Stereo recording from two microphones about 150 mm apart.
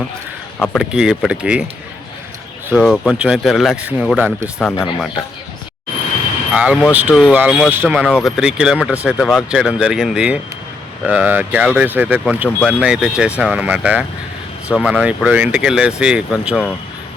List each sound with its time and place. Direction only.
0.6 s speech: centre (ahead or behind)
2.7 s speech: centre (ahead or behind)
6.5 s speech: 5° right (ahead or behind)
7.1 s speech: 5° left (ahead or behind)
7.3 s speech: 5° right (ahead or behind)